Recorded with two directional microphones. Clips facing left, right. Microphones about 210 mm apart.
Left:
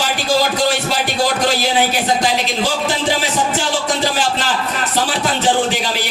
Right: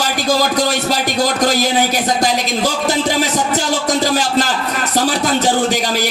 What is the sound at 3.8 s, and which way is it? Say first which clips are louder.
A man's voice: right 2 dB; 40° right (ahead or behind).